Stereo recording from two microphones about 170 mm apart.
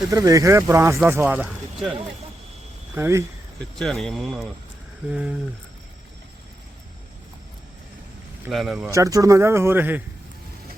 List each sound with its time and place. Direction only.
0.1 s speech: 20° right (ahead or behind)
2.9 s speech: 15° right (ahead or behind)
3.8 s speech: centre (ahead or behind)
8.4 s speech: centre (ahead or behind)
8.9 s speech: 20° right (ahead or behind)